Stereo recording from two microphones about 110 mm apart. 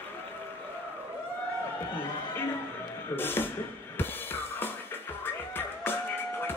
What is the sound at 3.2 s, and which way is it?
Speech, 20° left (ahead or behind).